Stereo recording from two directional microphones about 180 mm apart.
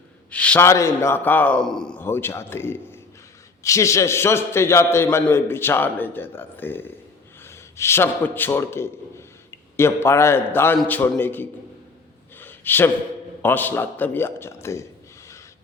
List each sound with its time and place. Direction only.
0.3 s a man's voice: 5° left (ahead or behind)
12.4 s a sound: 10° left (ahead or behind)
13.4 s a man's voice: 10° left (ahead or behind)